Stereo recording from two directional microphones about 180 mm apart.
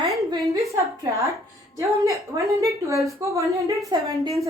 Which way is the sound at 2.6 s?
15° right (ahead or behind).